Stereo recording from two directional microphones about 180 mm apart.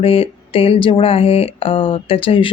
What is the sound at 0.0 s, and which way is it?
A woman's voice, 30° left (ahead or behind).